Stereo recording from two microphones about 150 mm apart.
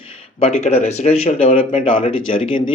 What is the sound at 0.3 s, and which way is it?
Speech, 45° left (ahead or behind).